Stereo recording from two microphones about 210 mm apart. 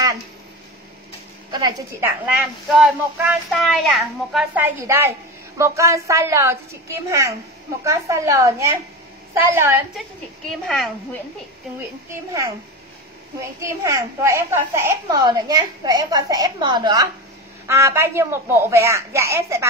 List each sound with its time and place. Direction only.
1.5 s a woman's voice: 15° right (ahead or behind)
2.7 s a woman's voice: centre (ahead or behind)
12.3 s a woman's voice: 15° right (ahead or behind)